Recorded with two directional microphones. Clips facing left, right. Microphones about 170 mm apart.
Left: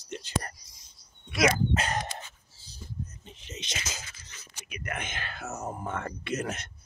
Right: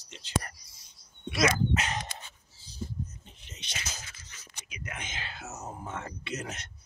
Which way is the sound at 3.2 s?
90° left.